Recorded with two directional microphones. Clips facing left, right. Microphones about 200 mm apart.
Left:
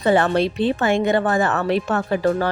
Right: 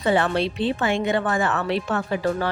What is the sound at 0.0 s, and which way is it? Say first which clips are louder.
Speech: left 4 dB; 45° left (ahead or behind).